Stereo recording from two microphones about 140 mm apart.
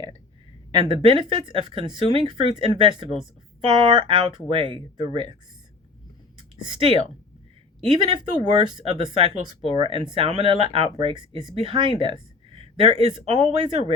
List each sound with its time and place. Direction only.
0.8 s speech: 35° right (ahead or behind)
6.6 s speech: 35° right (ahead or behind)